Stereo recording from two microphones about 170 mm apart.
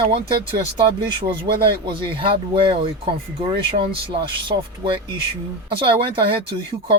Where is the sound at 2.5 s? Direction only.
30° right (ahead or behind).